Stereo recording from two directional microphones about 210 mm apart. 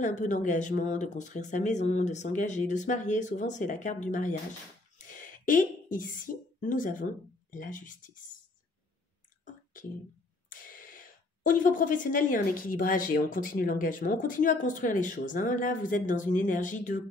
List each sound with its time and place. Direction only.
0.0 s speech: 35° left (ahead or behind)
10.5 s speech: 40° left (ahead or behind)